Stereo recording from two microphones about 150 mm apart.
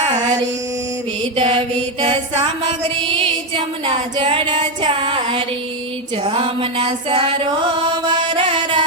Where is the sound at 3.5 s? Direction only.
35° right (ahead or behind).